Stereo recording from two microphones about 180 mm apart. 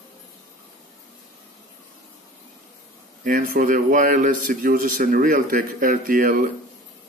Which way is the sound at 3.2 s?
50° right (ahead or behind).